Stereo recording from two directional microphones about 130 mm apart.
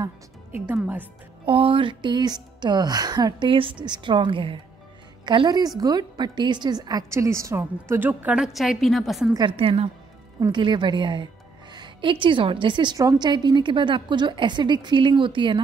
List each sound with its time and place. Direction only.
1.4 s a woman's voice: 45° right (ahead or behind); by 8.5 s 10° right (ahead or behind)
8.5 s a woman's voice: centre (ahead or behind)
9.3 s a woman's voice: 40° right (ahead or behind)
10.5 s a woman's voice: 35° right (ahead or behind)